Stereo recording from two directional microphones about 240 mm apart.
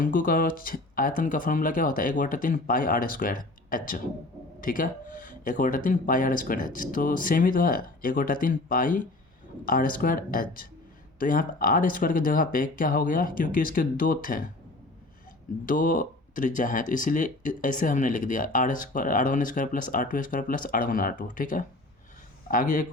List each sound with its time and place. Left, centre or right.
0.0 s speech: left
15.6 s speech: left